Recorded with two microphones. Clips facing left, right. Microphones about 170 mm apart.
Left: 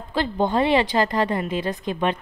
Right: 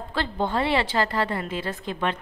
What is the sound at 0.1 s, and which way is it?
A woman's voice, 15° left (ahead or behind).